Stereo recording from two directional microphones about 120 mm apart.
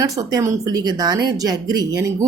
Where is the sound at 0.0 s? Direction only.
30° right (ahead or behind).